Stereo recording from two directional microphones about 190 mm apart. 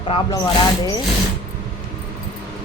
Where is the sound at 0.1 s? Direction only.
25° left (ahead or behind).